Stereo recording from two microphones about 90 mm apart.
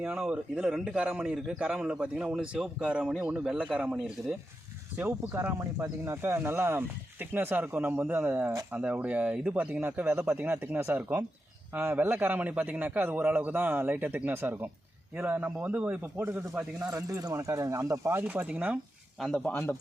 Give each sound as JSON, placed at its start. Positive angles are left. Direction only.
{"t": 0.2, "sound": "speech", "side_deg": -15}
{"t": 4.9, "sound": "a man's voice", "side_deg": -25}
{"t": 16.8, "sound": "speech", "side_deg": -40}
{"t": 18.2, "sound": "speech", "side_deg": -15}
{"t": 19.2, "sound": "speech", "side_deg": 0}
{"t": 19.5, "sound": "a man's voice", "side_deg": 25}